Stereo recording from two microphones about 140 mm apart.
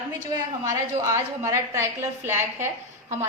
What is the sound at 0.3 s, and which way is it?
A woman's voice, 20° right (ahead or behind).